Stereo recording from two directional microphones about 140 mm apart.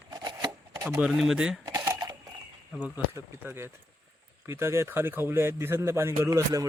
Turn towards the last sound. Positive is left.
turn(degrees=-25)  # may be behind; listen again after turning